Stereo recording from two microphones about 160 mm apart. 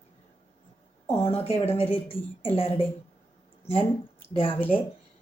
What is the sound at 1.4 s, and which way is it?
Speech, 35° left (ahead or behind).